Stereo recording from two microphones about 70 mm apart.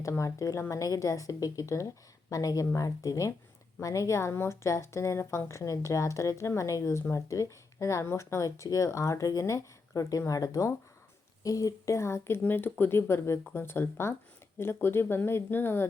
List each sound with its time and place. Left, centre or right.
0.0 s a woman's voice: left
12.4 s speech: left